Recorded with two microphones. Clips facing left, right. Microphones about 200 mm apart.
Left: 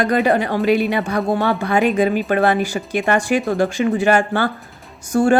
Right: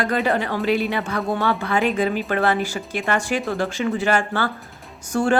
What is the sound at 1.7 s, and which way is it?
Speech, 15° left (ahead or behind).